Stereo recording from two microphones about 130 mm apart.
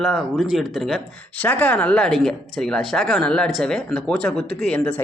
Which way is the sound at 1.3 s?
10° left (ahead or behind).